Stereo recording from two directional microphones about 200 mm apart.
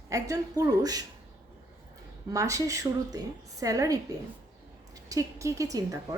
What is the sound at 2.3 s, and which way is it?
A woman's voice, 15° right (ahead or behind).